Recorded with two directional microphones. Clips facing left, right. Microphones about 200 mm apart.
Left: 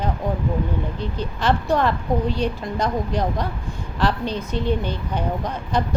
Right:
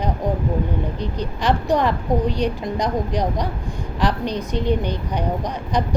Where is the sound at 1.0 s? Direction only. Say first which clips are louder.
Right 1 dB; 15° right (ahead or behind).